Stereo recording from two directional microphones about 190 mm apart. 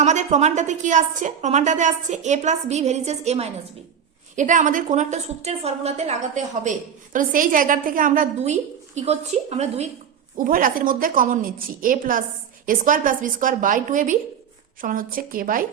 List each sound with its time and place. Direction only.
0.0 s a woman's voice: 40° right (ahead or behind)
10.3 s a woman's voice: 45° right (ahead or behind)